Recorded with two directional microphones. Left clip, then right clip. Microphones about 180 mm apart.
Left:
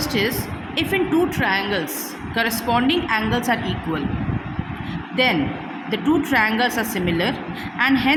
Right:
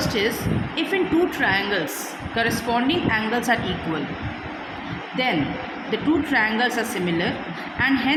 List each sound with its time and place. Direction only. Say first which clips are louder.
0.0 s vehicle: left 1 dB; 20° left (ahead or behind)
0.8 s a woman's voice: left 2 dB; 20° left (ahead or behind)
5.1 s a woman's voice: left 4 dB; 20° left (ahead or behind)